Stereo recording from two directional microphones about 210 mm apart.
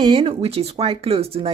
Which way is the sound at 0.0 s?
25° right (ahead or behind).